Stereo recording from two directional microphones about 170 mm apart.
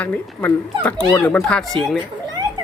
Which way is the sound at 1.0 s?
20° left (ahead or behind).